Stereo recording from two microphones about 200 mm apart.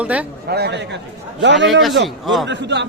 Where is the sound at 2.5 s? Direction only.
60° right (ahead or behind).